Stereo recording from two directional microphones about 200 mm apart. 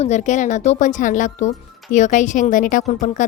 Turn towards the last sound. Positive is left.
turn(degrees=40)  # may be behind; listen again after turning